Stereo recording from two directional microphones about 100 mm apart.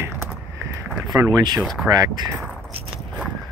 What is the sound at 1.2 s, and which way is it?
Speech, 45° right (ahead or behind).